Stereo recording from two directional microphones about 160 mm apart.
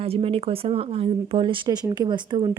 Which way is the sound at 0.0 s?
40° right (ahead or behind).